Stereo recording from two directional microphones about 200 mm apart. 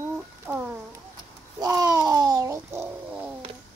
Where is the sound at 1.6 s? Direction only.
15° right (ahead or behind).